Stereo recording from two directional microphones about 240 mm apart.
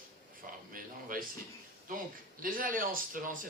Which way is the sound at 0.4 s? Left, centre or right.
Right.